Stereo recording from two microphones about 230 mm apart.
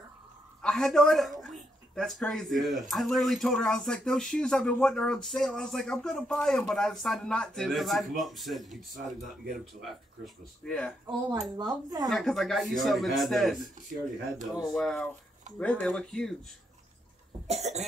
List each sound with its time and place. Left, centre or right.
0.6 s a woman's voice: centre
17.5 s cough: right